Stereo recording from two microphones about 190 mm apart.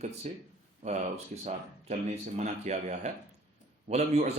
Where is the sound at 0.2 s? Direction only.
35° right (ahead or behind).